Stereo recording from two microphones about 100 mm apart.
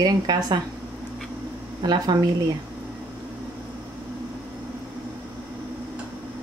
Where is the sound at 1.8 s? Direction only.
45° right (ahead or behind).